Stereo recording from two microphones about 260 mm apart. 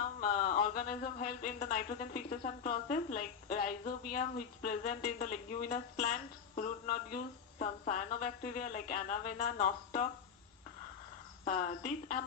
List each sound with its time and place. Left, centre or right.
0.2 s speech: left
11.4 s speech: left